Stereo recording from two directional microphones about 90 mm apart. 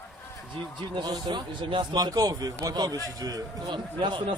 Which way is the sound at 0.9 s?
55° right (ahead or behind).